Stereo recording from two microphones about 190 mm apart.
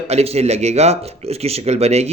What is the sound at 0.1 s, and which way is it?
Speech, 35° right (ahead or behind).